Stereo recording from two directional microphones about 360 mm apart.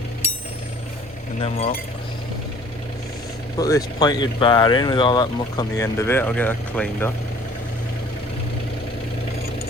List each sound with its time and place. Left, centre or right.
1.4 s speech: centre
3.6 s speech: centre